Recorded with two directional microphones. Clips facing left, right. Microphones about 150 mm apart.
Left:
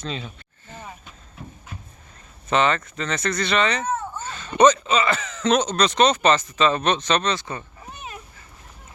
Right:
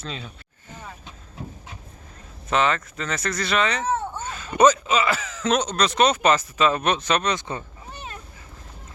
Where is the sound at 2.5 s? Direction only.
Centre (ahead or behind); by 7.6 s 20° right (ahead or behind).